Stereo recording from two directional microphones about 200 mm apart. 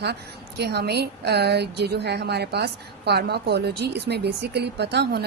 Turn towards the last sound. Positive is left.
turn(degrees=-55)  # may be behind; listen again after turning